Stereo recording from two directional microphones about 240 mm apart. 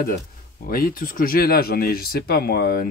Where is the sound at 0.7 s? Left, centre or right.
Left.